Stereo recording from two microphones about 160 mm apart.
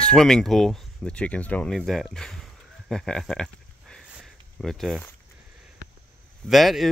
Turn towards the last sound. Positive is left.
turn(degrees=0)  # may be behind; listen again after turning